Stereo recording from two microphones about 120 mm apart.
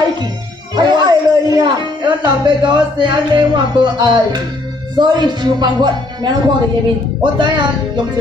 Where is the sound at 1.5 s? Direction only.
40° right (ahead or behind).